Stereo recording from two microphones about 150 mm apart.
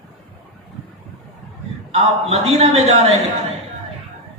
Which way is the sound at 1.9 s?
45° right (ahead or behind).